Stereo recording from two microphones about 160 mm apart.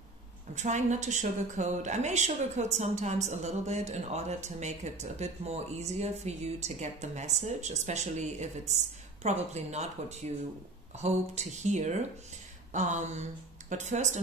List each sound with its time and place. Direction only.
0.6 s a woman's voice: 50° right (ahead or behind)